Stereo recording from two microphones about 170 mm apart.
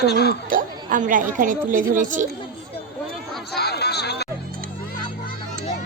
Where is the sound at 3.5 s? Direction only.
75° left (ahead or behind).